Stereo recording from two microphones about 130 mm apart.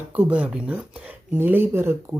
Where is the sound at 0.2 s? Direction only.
10° right (ahead or behind).